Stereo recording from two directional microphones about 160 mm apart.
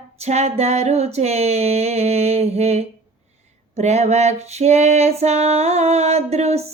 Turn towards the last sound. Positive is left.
turn(degrees=-40)  # may be behind; listen again after turning